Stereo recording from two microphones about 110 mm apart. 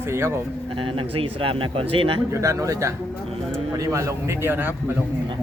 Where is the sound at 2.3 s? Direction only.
30° right (ahead or behind).